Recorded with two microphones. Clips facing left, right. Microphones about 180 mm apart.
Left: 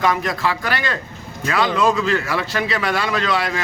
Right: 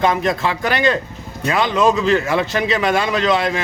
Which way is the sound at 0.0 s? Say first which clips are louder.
Right 3 dB; 25° right (ahead or behind).